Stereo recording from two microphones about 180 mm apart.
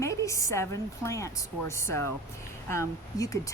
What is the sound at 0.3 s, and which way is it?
Speech, 15° left (ahead or behind).